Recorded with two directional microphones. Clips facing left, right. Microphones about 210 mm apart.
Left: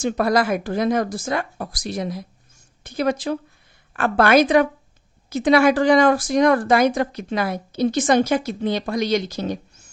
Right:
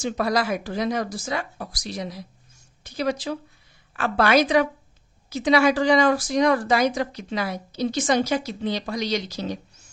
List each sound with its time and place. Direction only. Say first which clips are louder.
0.0 s speech: left 4 dB; 50° left (ahead or behind)